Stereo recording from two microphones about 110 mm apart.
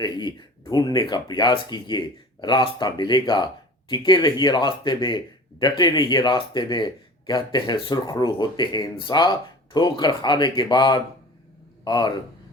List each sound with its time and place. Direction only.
0.0 s speech: 45° left (ahead or behind)